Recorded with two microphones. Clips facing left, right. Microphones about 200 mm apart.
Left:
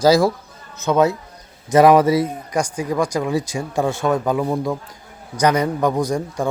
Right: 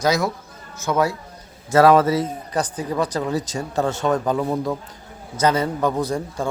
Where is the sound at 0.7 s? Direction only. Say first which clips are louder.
Left 4 dB; 20° left (ahead or behind).